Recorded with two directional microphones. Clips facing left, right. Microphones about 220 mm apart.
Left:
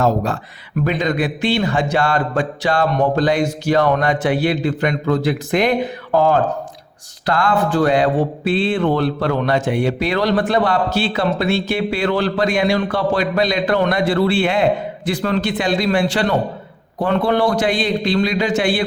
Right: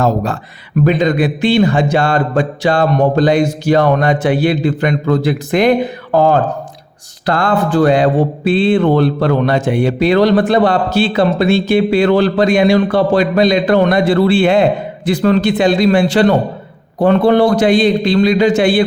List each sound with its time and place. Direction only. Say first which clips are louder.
0.9 s speech: right 6 dB; 25° right (ahead or behind)
7.3 s speech: right 3 dB; 25° right (ahead or behind)